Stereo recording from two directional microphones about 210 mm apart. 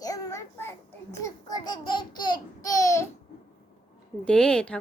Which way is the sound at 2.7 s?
15° left (ahead or behind).